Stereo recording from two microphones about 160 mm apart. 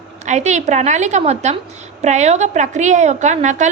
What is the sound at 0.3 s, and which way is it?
A woman's voice, 45° right (ahead or behind).